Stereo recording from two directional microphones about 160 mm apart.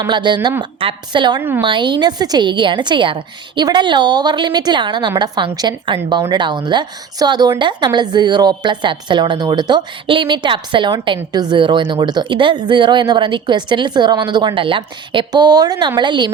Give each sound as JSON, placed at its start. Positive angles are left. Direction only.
{"t": 0.0, "sound": "speech", "side_deg": -30}
{"t": 1.4, "sound": "a woman's voice", "side_deg": -15}
{"t": 1.6, "sound": "speech", "side_deg": -30}